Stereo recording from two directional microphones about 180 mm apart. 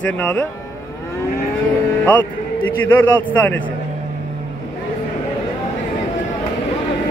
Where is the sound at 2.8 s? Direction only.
10° left (ahead or behind).